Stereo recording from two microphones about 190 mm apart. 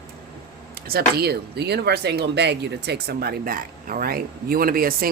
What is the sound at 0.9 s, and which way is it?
Speech, 55° right (ahead or behind).